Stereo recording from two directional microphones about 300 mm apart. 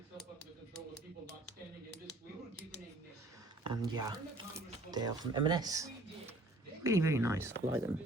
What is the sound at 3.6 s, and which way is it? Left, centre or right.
Speech, centre.